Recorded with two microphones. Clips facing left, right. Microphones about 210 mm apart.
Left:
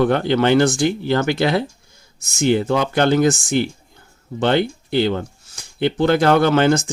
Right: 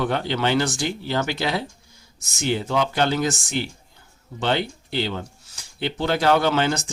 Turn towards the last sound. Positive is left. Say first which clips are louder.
# left 6 dB
turn(degrees=50)  # may be behind; listen again after turning